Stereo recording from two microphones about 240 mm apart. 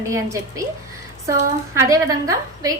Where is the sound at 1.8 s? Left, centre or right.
Centre.